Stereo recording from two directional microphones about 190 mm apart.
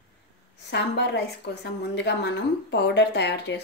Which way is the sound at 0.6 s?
65° left (ahead or behind).